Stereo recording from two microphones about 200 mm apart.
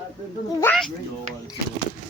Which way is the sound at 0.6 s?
5° left (ahead or behind).